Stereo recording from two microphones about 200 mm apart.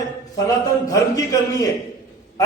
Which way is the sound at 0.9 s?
15° left (ahead or behind).